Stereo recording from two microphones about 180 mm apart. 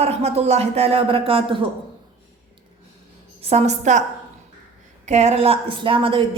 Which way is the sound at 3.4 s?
35° right (ahead or behind).